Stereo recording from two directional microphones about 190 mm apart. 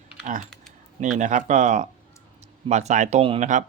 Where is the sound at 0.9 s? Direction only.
40° right (ahead or behind).